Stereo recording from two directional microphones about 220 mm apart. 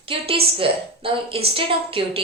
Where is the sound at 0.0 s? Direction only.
25° right (ahead or behind).